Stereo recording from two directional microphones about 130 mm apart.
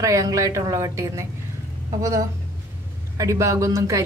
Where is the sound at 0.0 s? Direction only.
25° right (ahead or behind).